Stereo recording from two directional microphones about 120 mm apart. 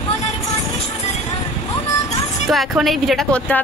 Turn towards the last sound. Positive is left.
turn(degrees=0)  # may be behind; listen again after turning